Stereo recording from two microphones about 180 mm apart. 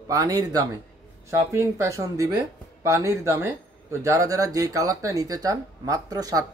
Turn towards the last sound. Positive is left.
turn(degrees=-20)  # may be behind; listen again after turning